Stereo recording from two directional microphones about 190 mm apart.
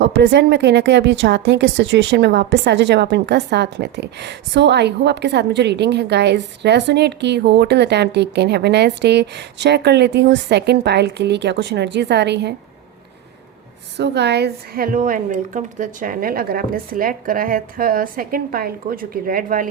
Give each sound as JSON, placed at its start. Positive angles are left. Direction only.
{"t": 0.0, "sound": "a woman's voice", "side_deg": -65}
{"t": 13.9, "sound": "a woman's voice", "side_deg": -65}